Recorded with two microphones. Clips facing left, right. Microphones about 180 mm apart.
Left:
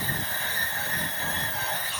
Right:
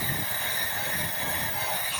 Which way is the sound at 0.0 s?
10° right (ahead or behind).